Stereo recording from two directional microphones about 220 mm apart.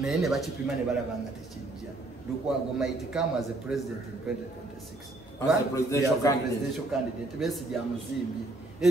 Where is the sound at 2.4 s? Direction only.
Centre (ahead or behind).